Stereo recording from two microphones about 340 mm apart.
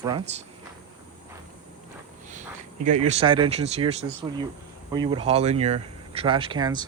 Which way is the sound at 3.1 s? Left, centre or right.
Centre.